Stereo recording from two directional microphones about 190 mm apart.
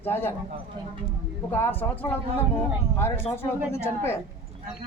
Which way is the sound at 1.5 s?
10° left (ahead or behind).